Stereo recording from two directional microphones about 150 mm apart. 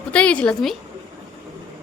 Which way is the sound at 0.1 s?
10° left (ahead or behind).